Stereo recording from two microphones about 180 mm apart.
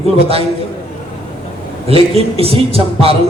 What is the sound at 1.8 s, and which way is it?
A man's voice, 35° right (ahead or behind).